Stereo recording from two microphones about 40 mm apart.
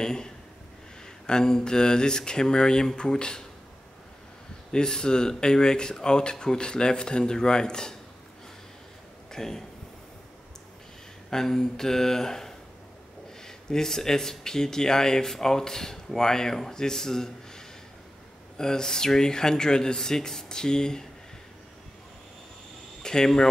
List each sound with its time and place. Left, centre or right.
0.0 s speech: centre
4.7 s speech: centre
9.3 s speech: centre
11.2 s speech: centre
23.0 s speech: centre